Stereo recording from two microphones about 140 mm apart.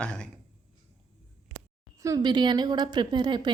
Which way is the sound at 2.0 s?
25° right (ahead or behind).